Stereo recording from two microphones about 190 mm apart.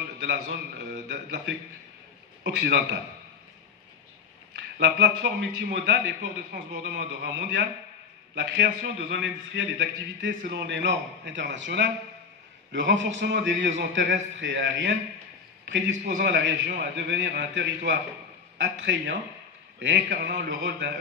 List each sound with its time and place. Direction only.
0.2 s a man's voice: 65° right (ahead or behind)
4.7 s a man's voice: 60° right (ahead or behind)
16.2 s a man's voice: 65° right (ahead or behind)